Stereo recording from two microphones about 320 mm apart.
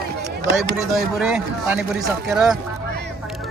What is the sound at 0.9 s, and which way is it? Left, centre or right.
Speech, centre.